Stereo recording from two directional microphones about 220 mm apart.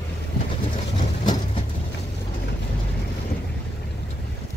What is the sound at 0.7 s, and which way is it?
Vehicle, 20° left (ahead or behind).